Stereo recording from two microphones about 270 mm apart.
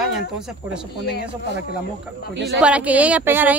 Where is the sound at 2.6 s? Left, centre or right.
Centre.